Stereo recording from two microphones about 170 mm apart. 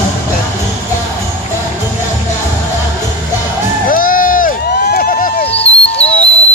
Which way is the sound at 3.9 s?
55° left (ahead or behind).